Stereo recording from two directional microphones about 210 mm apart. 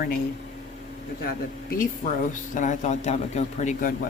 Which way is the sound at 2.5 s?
35° left (ahead or behind).